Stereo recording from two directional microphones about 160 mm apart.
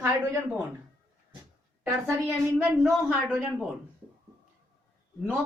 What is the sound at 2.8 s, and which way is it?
Speech, 10° right (ahead or behind).